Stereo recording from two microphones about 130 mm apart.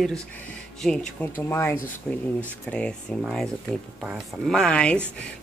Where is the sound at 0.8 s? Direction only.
5° left (ahead or behind).